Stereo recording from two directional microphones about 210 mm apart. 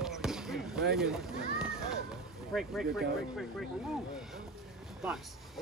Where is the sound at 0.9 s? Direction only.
Centre (ahead or behind).